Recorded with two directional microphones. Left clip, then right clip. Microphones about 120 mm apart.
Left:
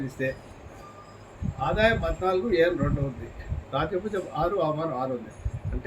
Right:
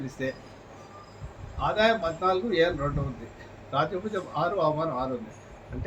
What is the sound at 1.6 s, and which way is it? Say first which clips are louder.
A man's voice: even; 10° left (ahead or behind).